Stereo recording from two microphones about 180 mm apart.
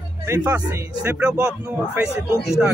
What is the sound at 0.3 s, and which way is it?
A man's voice, 10° right (ahead or behind).